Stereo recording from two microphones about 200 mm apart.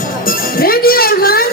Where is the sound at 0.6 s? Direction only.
45° left (ahead or behind).